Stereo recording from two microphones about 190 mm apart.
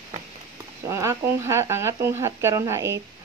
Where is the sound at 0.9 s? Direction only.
15° right (ahead or behind).